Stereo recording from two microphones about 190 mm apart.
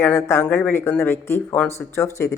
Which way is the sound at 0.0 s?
15° left (ahead or behind).